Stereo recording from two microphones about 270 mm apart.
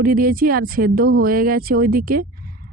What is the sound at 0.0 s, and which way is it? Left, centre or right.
Speech, right.